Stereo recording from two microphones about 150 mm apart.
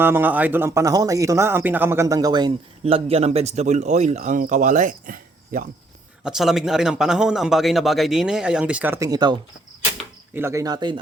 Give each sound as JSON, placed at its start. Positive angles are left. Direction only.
{"t": 0.0, "sound": "speech", "side_deg": -15}
{"t": 2.8, "sound": "speech", "side_deg": -40}
{"t": 6.2, "sound": "speech", "side_deg": -5}
{"t": 9.0, "sound": "speech", "side_deg": -30}